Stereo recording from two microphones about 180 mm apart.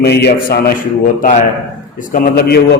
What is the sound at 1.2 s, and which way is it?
A man's voice, 45° left (ahead or behind).